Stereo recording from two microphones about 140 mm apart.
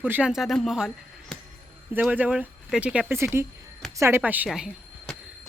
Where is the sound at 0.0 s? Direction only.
10° right (ahead or behind).